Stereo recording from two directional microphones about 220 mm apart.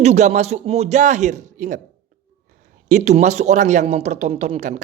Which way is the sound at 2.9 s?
30° right (ahead or behind).